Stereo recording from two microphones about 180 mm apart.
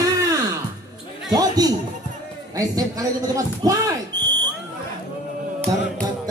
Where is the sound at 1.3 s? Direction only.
20° right (ahead or behind).